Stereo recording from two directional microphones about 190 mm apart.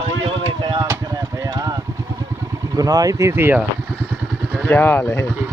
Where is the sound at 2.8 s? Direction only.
20° right (ahead or behind).